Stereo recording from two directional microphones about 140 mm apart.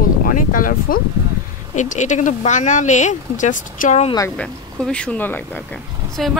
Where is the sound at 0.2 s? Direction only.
80° left.